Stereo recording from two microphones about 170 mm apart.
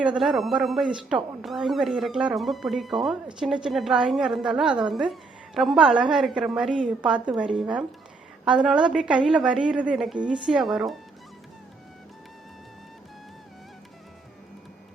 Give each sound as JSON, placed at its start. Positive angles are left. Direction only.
{"t": 0.0, "sound": "speech", "side_deg": -5}